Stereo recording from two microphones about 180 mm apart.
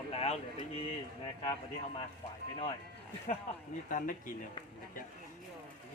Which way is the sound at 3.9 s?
50° left (ahead or behind).